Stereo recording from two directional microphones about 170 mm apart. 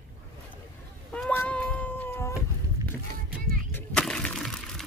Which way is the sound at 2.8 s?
20° right (ahead or behind).